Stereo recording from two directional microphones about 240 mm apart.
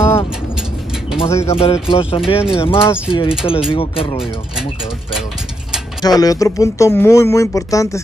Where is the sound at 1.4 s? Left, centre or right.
Left.